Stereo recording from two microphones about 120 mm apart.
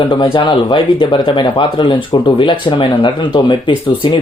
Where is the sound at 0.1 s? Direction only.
40° left (ahead or behind).